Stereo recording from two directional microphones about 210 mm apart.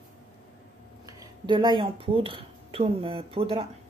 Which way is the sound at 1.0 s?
20° right (ahead or behind).